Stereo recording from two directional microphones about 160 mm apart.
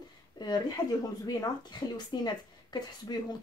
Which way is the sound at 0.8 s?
25° left (ahead or behind).